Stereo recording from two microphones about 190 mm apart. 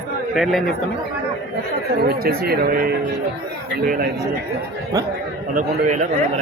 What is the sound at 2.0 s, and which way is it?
Speech, 55° right (ahead or behind).